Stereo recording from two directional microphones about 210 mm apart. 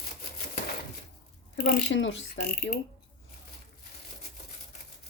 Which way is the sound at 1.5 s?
45° left (ahead or behind).